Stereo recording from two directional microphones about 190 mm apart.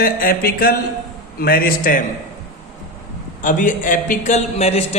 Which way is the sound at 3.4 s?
45° left (ahead or behind).